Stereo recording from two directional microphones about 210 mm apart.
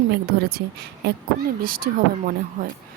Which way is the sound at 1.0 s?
50° right (ahead or behind).